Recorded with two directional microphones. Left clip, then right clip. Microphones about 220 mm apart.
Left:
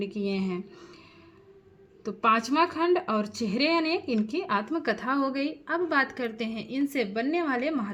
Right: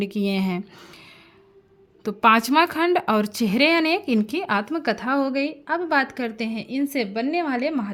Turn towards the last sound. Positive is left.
turn(degrees=-30)  # may be behind; listen again after turning